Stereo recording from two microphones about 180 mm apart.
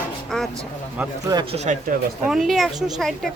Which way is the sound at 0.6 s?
20° right (ahead or behind).